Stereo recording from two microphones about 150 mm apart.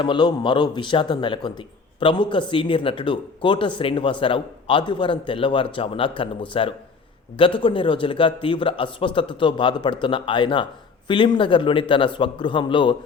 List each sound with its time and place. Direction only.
0.0 s speech: 30° left (ahead or behind)